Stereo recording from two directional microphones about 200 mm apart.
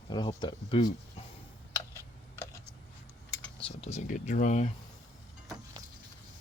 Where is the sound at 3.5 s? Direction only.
30° left (ahead or behind).